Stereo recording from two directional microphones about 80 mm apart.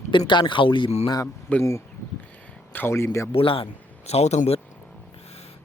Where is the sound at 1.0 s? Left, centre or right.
Left.